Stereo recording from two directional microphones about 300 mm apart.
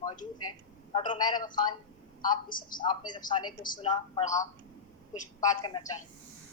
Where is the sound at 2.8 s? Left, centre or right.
Centre.